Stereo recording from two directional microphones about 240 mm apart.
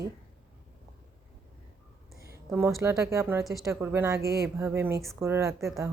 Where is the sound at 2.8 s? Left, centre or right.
Centre.